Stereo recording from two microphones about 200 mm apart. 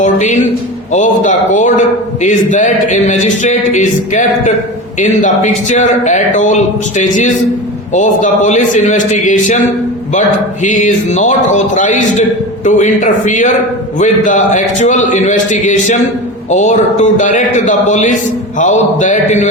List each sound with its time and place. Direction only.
0.0 s a man's voice: 35° left (ahead or behind)